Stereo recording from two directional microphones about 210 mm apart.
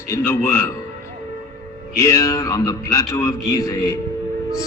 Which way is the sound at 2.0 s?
15° left (ahead or behind).